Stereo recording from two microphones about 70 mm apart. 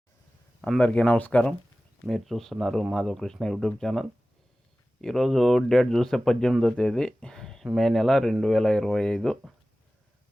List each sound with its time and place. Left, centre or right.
0.8 s speech: centre
2.0 s speech: centre
6.7 s speech: centre